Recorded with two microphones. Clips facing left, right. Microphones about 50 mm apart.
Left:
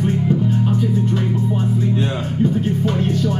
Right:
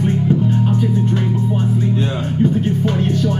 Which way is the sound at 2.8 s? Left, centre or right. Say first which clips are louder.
Right 1 dB; right.